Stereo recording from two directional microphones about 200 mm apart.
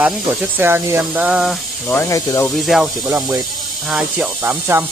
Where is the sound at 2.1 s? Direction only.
15° left (ahead or behind).